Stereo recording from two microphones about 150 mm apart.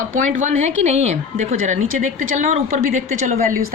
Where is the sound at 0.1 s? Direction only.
55° right (ahead or behind).